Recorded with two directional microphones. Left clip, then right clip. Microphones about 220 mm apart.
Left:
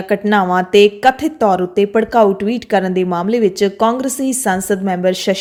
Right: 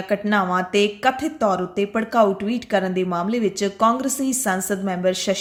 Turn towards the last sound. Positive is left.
turn(degrees=35)  # may be behind; listen again after turning